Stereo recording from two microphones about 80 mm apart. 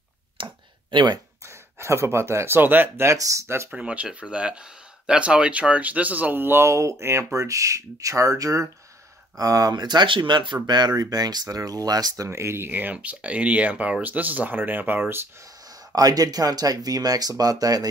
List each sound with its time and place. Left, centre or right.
0.4 s a sound: right
1.4 s speech: right
3.2 s speech: right
3.7 s speech: centre; by 12.3 s right
12.3 s speech: right
15.9 s speech: right